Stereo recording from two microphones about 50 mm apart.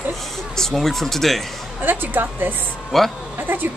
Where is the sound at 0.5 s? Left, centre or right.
Centre.